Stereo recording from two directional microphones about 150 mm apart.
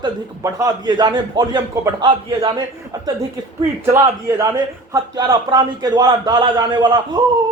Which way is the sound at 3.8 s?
15° right (ahead or behind).